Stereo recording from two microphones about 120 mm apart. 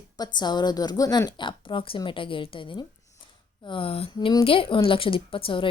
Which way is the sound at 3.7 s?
50° left (ahead or behind).